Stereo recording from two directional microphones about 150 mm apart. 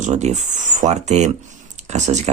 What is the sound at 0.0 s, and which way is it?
Speech, 50° right (ahead or behind).